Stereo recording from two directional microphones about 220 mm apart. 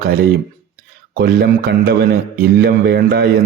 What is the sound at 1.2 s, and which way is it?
Speech, 45° right (ahead or behind).